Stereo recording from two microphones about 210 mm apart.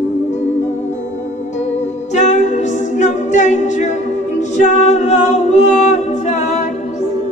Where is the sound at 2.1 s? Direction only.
35° left (ahead or behind).